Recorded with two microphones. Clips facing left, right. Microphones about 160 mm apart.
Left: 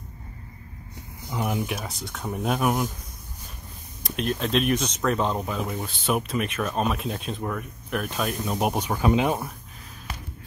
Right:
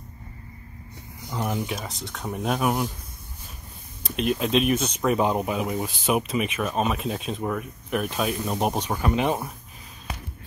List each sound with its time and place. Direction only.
1.3 s speech: centre (ahead or behind)
4.0 s speech: 5° right (ahead or behind); by 9.3 s 15° left (ahead or behind)